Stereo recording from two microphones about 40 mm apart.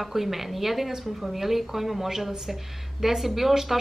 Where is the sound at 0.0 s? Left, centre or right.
Centre.